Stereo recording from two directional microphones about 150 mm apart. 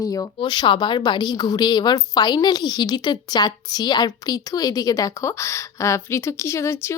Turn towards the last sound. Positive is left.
turn(degrees=15)  # may be behind; listen again after turning